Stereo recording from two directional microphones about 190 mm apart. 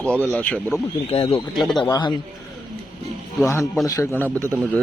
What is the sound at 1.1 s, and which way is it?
Speech, 30° left (ahead or behind).